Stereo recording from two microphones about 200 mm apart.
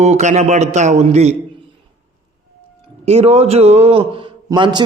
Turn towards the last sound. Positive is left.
turn(degrees=-25)  # may be behind; listen again after turning